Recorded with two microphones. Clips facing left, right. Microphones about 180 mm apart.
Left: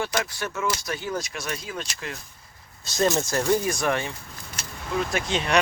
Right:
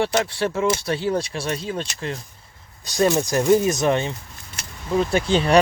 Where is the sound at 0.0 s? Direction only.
30° right (ahead or behind).